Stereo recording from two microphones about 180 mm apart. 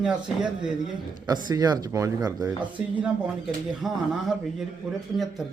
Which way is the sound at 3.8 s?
Centre (ahead or behind).